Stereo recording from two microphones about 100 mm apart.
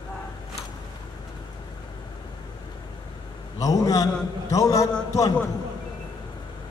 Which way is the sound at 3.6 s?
35° left (ahead or behind).